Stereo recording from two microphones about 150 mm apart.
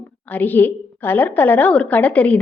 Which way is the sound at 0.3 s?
10° left (ahead or behind).